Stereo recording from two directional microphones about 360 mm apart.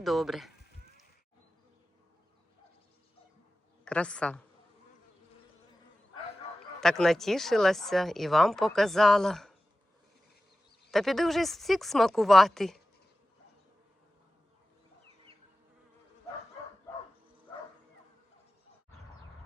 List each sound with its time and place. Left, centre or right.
0.0 s a woman's voice: centre
3.8 s a woman's voice: centre
6.7 s a woman's voice: centre
10.9 s a woman's voice: centre